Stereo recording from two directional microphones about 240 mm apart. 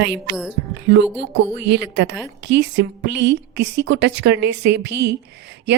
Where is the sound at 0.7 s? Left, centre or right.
Right.